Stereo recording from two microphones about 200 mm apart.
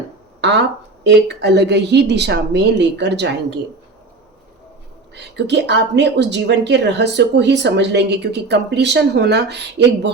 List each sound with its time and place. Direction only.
1.0 s a woman's voice: 55° right (ahead or behind)
5.1 s a woman's voice: 60° right (ahead or behind)